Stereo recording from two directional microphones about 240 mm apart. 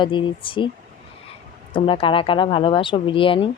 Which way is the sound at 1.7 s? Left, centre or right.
Left.